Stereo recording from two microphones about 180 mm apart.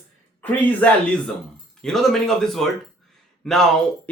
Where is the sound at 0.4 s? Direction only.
10° left (ahead or behind).